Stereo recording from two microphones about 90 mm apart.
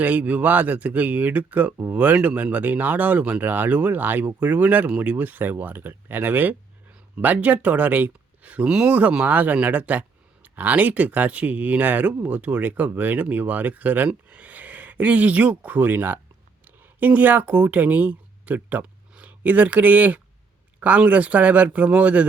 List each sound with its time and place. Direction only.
0.0 s speech: 15° right (ahead or behind)